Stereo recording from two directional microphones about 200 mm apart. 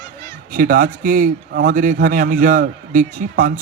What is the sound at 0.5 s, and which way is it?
A man's voice, 45° right (ahead or behind).